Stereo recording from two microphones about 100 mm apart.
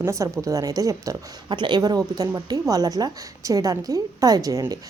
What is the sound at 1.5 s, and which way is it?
A woman's voice, 50° right (ahead or behind).